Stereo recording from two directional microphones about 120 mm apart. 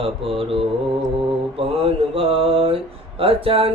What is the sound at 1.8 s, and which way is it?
Mantra, 50° right (ahead or behind).